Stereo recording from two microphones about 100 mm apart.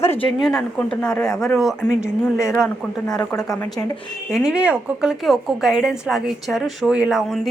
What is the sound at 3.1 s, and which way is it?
Speech, 40° left (ahead or behind).